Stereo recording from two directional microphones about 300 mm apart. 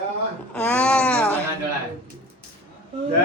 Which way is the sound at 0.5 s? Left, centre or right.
Centre.